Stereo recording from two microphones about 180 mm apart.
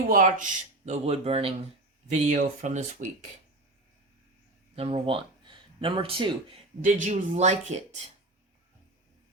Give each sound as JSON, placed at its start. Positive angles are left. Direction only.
{"t": 0.1, "sound": "speech", "side_deg": -45}
{"t": 4.7, "sound": "speech", "side_deg": -35}
{"t": 6.8, "sound": "speech", "side_deg": -40}